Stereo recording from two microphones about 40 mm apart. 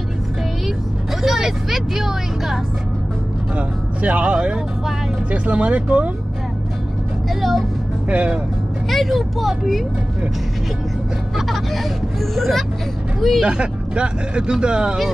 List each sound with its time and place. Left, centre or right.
1.2 s music: centre
3.5 s speech: right
7.2 s speech: centre
8.1 s speech: right
8.9 s speech: centre
11.3 s speech: centre
13.4 s speech: right